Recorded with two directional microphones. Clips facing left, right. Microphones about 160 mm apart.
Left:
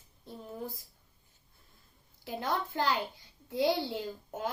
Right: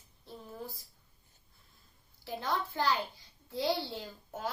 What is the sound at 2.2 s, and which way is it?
A child's voice, 20° left (ahead or behind).